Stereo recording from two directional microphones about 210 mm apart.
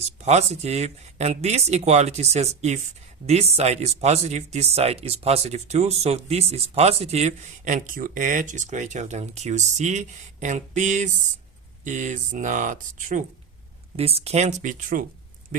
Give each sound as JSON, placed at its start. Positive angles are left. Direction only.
{"t": 0.2, "sound": "speech", "side_deg": -30}